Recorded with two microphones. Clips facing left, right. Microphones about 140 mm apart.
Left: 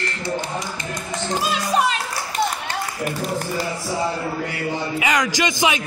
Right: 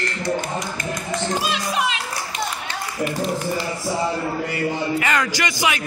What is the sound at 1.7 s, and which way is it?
Music, 40° left (ahead or behind).